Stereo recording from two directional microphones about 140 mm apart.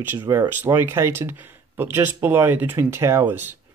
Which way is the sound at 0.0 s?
15° right (ahead or behind).